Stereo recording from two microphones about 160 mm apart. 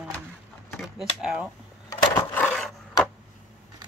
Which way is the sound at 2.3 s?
5° left (ahead or behind).